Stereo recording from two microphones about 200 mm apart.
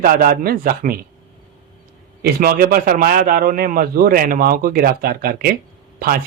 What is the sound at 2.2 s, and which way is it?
A man's voice, 50° right (ahead or behind).